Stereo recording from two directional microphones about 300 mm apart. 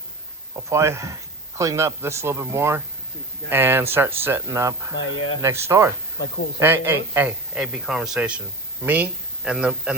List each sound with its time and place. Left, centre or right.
0.7 s speech: centre
4.9 s speech: left
5.4 s speech: centre